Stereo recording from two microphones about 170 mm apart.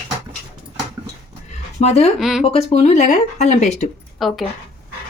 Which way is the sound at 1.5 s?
40° left (ahead or behind).